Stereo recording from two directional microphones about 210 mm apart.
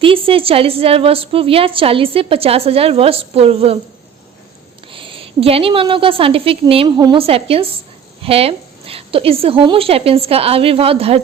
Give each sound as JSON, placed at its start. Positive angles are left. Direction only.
{"t": 0.0, "sound": "a woman's voice", "side_deg": -25}
{"t": 4.9, "sound": "a woman's voice", "side_deg": -25}